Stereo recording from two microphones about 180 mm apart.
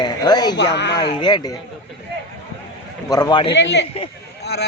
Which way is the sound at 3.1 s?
25° left (ahead or behind).